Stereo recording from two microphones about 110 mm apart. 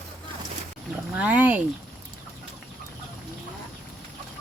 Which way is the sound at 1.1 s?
15° right (ahead or behind).